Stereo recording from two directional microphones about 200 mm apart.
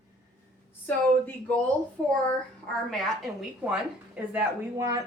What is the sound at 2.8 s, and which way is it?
A woman's voice, centre (ahead or behind).